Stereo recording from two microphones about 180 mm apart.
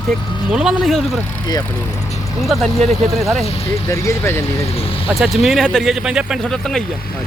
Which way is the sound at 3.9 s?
15° left (ahead or behind).